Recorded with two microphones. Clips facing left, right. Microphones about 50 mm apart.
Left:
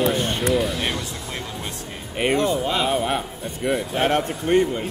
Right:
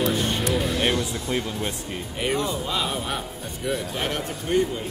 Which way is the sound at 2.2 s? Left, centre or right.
Left.